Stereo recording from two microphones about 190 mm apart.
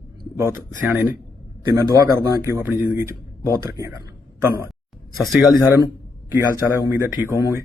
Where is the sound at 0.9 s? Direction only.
5° right (ahead or behind).